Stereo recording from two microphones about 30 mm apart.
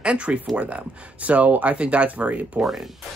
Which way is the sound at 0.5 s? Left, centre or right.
Right.